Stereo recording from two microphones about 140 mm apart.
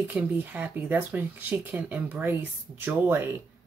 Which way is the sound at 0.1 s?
10° right (ahead or behind).